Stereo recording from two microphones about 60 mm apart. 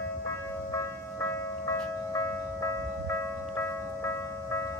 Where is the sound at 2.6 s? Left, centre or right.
Left.